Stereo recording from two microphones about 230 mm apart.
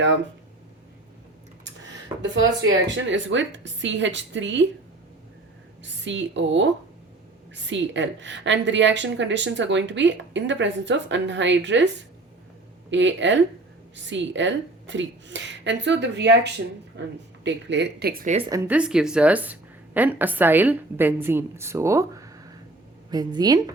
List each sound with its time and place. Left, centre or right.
2.3 s a woman's voice: right
5.8 s a woman's voice: right
12.9 s a woman's voice: right
18.3 s a woman's voice: centre